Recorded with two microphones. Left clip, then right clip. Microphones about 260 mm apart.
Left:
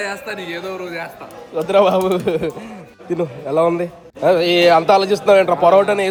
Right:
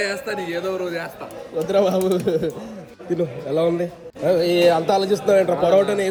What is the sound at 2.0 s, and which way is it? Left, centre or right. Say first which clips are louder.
A man's voice: left 3 dB; left.